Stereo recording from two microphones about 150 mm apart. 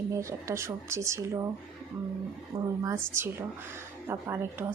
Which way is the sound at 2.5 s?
40° right (ahead or behind).